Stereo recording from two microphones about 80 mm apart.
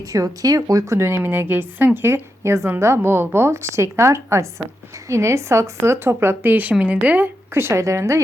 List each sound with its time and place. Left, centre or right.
0.1 s a woman's voice: right; by 7.3 s centre
7.5 s a woman's voice: right